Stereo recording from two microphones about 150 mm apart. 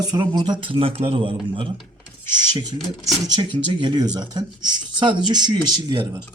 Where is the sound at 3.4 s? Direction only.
30° right (ahead or behind).